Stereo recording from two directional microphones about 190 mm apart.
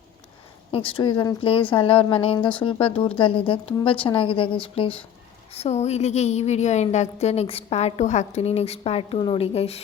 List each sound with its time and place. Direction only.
0.7 s a woman's voice: 30° left (ahead or behind)